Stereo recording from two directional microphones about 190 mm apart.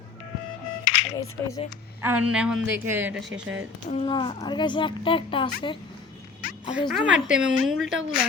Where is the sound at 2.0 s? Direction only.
10° right (ahead or behind).